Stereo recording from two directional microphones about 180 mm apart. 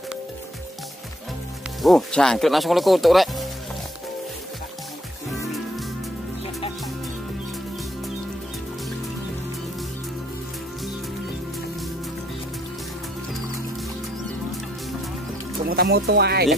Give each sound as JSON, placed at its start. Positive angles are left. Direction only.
{"t": 1.8, "sound": "speech", "side_deg": 0}
{"t": 15.6, "sound": "speech", "side_deg": -55}